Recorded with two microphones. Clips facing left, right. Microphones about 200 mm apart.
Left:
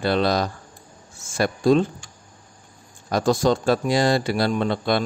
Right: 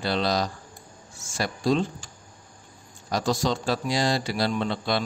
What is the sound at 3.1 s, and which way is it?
Speech, 55° left (ahead or behind).